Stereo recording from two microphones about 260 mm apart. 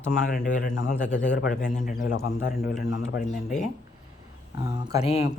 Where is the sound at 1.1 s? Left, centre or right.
Left.